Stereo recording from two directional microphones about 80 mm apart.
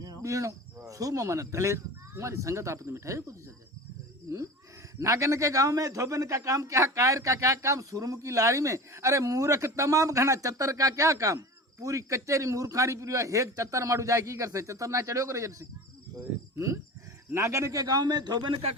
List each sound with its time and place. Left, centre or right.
0.2 s a man's voice: right
4.9 s a man's voice: right